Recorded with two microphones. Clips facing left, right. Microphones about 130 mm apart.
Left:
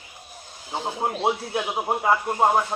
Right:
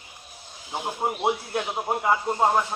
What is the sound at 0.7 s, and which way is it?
A man's voice, 20° left (ahead or behind).